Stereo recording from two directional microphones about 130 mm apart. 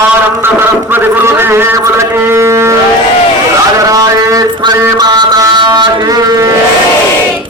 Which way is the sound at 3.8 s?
25° right (ahead or behind).